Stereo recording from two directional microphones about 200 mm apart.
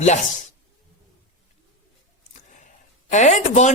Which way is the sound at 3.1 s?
35° left (ahead or behind).